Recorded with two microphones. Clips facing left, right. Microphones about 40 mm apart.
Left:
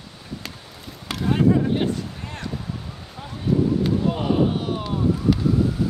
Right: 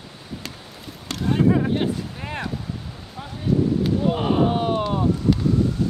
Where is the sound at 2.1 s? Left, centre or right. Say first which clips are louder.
Right 5 dB; right.